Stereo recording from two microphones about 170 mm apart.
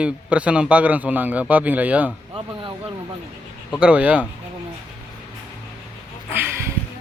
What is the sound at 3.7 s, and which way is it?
Speech, 5° right (ahead or behind).